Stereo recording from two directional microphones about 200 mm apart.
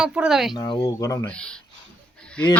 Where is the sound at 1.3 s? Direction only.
5° left (ahead or behind).